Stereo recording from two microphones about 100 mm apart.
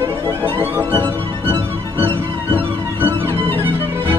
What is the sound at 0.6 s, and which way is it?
Music, 20° right (ahead or behind).